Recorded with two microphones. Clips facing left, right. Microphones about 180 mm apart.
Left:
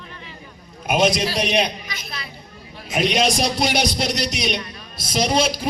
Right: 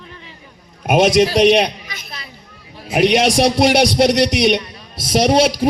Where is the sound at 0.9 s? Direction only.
80° right.